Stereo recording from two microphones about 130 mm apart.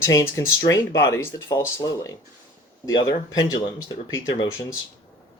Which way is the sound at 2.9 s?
30° left (ahead or behind).